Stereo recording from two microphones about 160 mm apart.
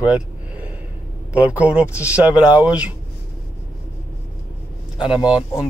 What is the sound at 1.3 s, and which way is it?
Speech, 10° right (ahead or behind).